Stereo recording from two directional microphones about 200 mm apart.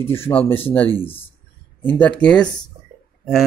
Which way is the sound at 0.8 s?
25° left (ahead or behind).